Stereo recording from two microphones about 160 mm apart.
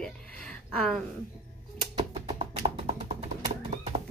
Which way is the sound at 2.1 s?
35° right (ahead or behind).